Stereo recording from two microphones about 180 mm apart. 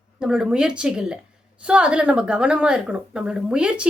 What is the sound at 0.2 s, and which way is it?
A woman's voice, 5° right (ahead or behind).